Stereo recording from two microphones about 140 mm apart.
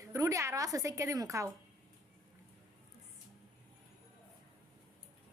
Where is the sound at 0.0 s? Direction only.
25° right (ahead or behind).